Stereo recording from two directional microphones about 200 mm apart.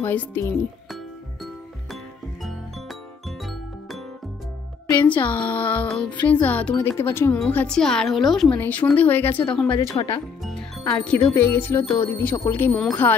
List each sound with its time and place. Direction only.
0.0 s a woman's voice: 10° left (ahead or behind)
3.3 s music: centre (ahead or behind)
5.2 s a woman's voice: 10° left (ahead or behind)
9.9 s speech: 25° left (ahead or behind)
10.4 s a woman's voice: 5° left (ahead or behind)